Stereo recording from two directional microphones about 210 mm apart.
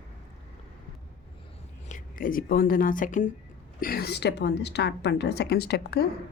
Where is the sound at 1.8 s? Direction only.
40° left (ahead or behind).